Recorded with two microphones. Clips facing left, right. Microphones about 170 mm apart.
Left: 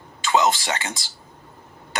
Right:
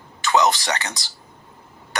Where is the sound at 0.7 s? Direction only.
20° left (ahead or behind).